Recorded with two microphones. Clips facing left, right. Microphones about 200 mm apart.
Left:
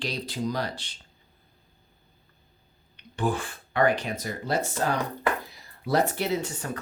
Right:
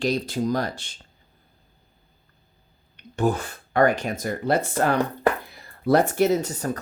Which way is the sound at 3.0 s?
45° right (ahead or behind).